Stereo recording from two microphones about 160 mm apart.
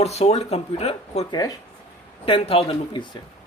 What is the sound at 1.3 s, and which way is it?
Speech, 25° left (ahead or behind).